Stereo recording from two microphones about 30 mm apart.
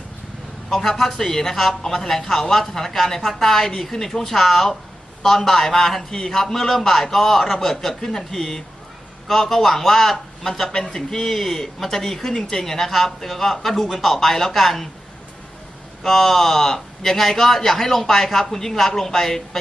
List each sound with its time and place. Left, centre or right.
0.7 s a man's voice: centre
9.2 s a man's voice: centre; by 12.6 s left
12.6 s a man's voice: centre
16.0 s a man's voice: centre